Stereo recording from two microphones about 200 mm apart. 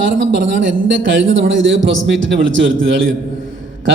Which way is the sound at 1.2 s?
70° right (ahead or behind).